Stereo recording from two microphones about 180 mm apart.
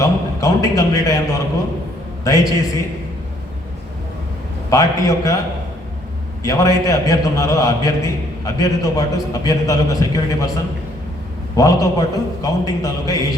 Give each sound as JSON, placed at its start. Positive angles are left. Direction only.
{"t": 0.0, "sound": "a sound", "side_deg": 20}
{"t": 2.2, "sound": "a man's voice", "side_deg": 20}
{"t": 4.7, "sound": "a man's voice", "side_deg": 20}
{"t": 6.4, "sound": "a man's voice", "side_deg": 20}
{"t": 11.5, "sound": "a man's voice", "side_deg": 20}